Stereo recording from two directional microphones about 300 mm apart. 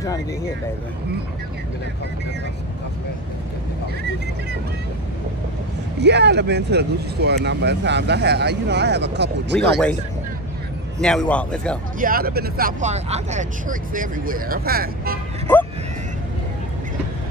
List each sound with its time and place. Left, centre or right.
5.9 s speech: right
11.0 s a man's voice: centre
12.0 s speech: right